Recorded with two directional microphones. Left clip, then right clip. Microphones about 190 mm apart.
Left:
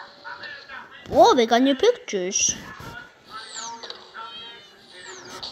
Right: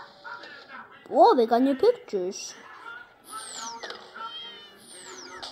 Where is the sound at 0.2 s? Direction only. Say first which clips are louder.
Left 3 dB; 55° right (ahead or behind).